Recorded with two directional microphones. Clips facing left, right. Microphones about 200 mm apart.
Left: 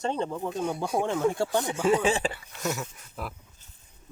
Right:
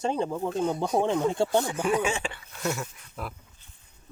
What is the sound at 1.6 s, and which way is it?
Speech, 25° left (ahead or behind).